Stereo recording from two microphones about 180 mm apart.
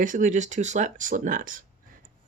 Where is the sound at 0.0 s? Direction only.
45° right (ahead or behind).